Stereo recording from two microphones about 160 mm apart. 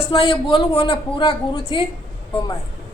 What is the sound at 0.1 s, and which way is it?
A man's voice, 30° left (ahead or behind).